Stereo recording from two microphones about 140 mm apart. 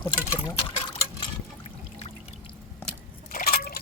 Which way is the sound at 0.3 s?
25° left (ahead or behind).